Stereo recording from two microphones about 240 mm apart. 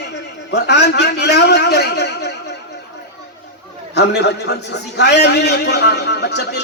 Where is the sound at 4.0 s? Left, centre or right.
Left.